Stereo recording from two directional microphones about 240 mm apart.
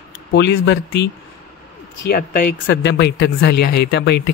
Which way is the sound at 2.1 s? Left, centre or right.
Left.